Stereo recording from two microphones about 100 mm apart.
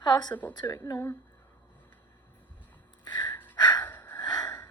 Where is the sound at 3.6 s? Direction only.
45° left (ahead or behind).